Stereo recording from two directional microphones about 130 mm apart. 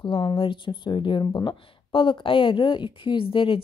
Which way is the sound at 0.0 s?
40° left (ahead or behind).